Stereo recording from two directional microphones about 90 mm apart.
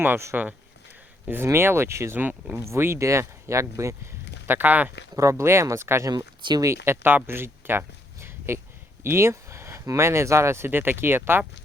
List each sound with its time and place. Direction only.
0.0 s speech: 25° right (ahead or behind)
1.5 s speech: 30° right (ahead or behind)
4.4 s speech: 20° right (ahead or behind)
5.1 s speech: 35° right (ahead or behind)
6.1 s speech: 50° right (ahead or behind)
6.7 s speech: 30° right (ahead or behind)